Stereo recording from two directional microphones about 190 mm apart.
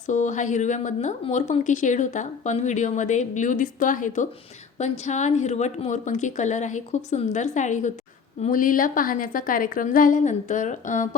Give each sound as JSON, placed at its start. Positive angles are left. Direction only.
{"t": 0.1, "sound": "a woman's voice", "side_deg": 40}